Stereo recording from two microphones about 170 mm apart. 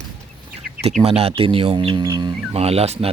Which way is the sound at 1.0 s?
35° right (ahead or behind).